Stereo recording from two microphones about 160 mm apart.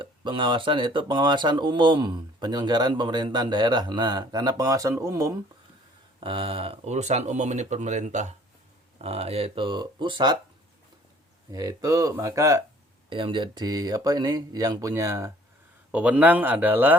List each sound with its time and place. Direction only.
0.0 s speech: 30° right (ahead or behind)
6.1 s speech: 35° right (ahead or behind)
11.5 s speech: 20° right (ahead or behind)
13.1 s speech: 30° right (ahead or behind)
15.9 s a man's voice: 10° right (ahead or behind)